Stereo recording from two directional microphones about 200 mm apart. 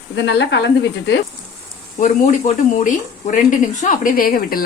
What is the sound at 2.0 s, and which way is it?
Speech, 35° left (ahead or behind).